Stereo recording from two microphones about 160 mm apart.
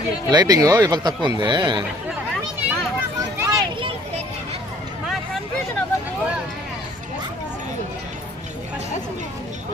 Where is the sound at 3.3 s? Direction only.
20° right (ahead or behind).